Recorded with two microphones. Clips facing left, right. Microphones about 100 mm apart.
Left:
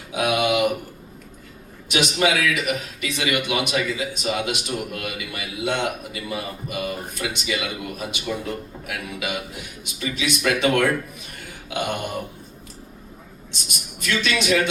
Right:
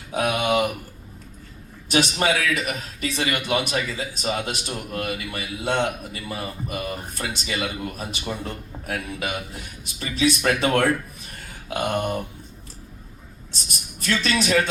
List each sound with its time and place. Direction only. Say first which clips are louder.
0.1 s a man's voice: left 1 dB; 35° right (ahead or behind)
1.9 s a man's voice: even; 35° right (ahead or behind)
13.5 s a man's voice: left 1 dB; 35° right (ahead or behind)